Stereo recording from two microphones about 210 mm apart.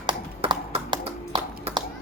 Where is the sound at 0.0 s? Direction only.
25° right (ahead or behind).